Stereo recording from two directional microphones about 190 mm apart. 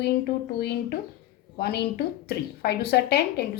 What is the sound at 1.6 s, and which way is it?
Speech, 60° left (ahead or behind).